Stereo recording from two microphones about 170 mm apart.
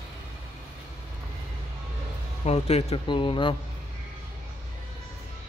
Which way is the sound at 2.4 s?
40° left (ahead or behind).